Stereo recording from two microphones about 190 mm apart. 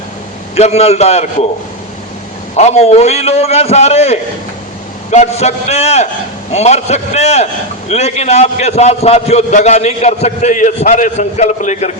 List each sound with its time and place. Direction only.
0.5 s a man's voice: 35° left (ahead or behind)
2.6 s a man's voice: 35° left (ahead or behind)